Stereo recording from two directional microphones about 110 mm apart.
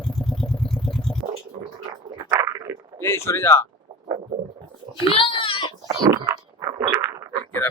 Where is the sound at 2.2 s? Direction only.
35° right (ahead or behind).